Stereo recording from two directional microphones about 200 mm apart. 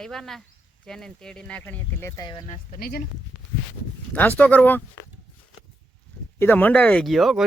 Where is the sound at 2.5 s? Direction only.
35° left (ahead or behind).